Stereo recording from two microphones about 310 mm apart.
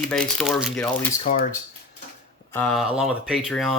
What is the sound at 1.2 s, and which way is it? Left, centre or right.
Speech, left.